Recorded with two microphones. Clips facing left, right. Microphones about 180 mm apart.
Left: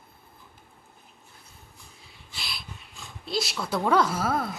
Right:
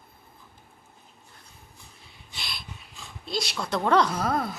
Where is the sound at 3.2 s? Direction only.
Centre (ahead or behind).